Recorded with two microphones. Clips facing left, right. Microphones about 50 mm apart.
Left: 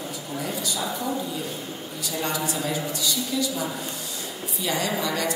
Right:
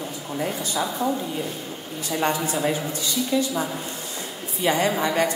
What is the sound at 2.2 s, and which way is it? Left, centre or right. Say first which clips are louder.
A woman's voice: right 5 dB; right.